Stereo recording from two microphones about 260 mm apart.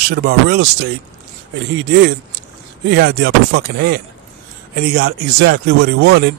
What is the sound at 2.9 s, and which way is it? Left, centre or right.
Speech, right.